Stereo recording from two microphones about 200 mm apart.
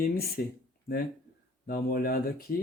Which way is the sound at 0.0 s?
50° left (ahead or behind).